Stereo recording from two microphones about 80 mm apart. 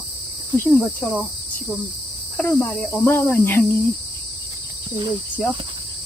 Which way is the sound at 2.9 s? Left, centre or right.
Left.